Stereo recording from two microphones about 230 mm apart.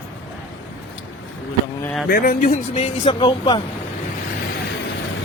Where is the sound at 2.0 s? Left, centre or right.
Left.